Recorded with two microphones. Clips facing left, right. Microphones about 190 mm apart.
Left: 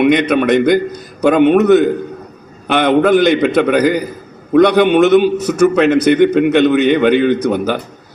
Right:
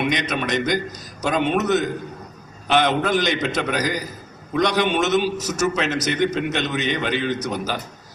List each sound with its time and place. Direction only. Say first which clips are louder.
0.0 s a man's voice: left 12 dB; 60° left (ahead or behind)